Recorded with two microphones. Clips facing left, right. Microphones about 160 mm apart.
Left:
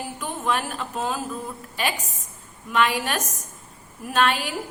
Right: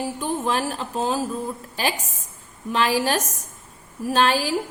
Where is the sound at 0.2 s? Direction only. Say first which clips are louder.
Right 1 dB; 30° right (ahead or behind).